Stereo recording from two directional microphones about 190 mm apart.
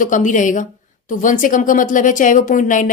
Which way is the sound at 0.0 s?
40° left (ahead or behind).